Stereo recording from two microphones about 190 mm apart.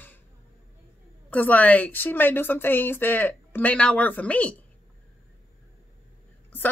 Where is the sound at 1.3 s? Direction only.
10° left (ahead or behind).